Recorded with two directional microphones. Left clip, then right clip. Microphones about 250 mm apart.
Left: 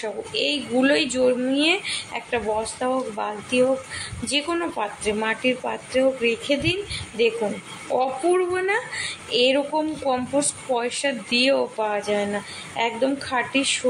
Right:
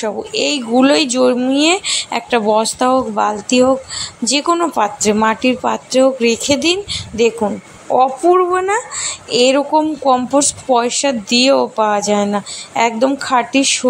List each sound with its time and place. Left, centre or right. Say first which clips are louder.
0.0 s speech: right 7 dB; right